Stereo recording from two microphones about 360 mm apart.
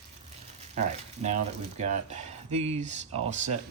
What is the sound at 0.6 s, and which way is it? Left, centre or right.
Speech, centre.